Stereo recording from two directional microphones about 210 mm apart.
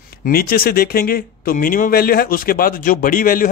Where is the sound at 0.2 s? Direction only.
45° left (ahead or behind).